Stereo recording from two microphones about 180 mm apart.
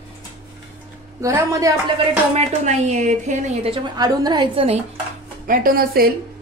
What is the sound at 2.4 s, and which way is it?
A woman's voice, 40° right (ahead or behind).